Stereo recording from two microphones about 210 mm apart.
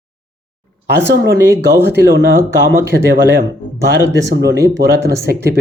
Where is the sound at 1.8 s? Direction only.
50° right (ahead or behind).